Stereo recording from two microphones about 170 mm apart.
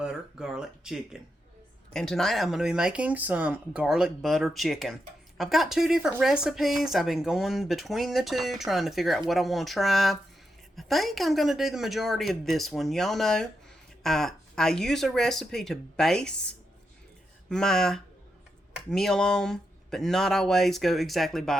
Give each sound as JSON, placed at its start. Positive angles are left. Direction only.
{"t": 0.0, "sound": "speech", "side_deg": -5}